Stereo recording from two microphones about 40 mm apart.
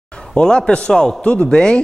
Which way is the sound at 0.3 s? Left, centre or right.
Left.